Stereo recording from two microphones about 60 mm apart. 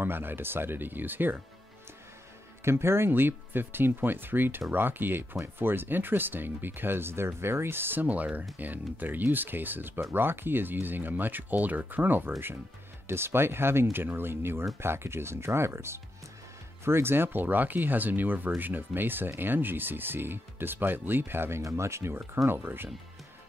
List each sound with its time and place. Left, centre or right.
0.0 s speech: right
2.6 s speech: right
21.6 s speech: right